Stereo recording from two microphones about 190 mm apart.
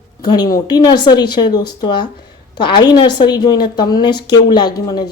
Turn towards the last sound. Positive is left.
turn(degrees=20)  # may be behind; listen again after turning